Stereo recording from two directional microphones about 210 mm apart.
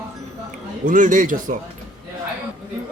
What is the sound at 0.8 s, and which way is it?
Speech, 40° right (ahead or behind).